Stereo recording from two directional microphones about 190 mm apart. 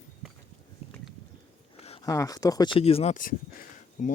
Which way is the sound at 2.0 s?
20° left (ahead or behind).